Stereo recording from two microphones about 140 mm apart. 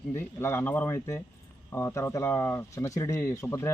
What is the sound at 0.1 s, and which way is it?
Speech, 15° left (ahead or behind).